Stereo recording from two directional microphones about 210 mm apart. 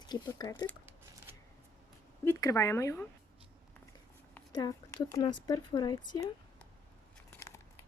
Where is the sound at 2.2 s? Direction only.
15° left (ahead or behind).